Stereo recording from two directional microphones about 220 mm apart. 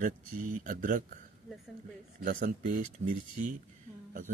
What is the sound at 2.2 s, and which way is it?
Speech, 40° right (ahead or behind).